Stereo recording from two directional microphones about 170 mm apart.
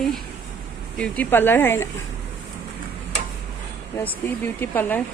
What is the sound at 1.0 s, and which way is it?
Speech, 10° left (ahead or behind).